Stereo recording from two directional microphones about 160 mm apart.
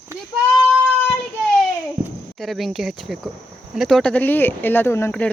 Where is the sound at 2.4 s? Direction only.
Centre (ahead or behind).